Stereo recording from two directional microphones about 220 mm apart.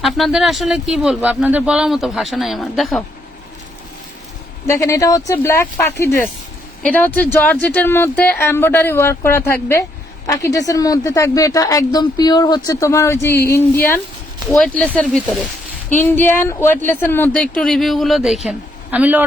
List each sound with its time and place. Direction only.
0.0 s speech: centre (ahead or behind)
4.6 s speech: 15° left (ahead or behind); by 19.2 s 5° right (ahead or behind)